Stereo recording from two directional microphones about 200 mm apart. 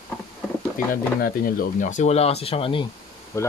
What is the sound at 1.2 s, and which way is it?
Speech, 45° left (ahead or behind).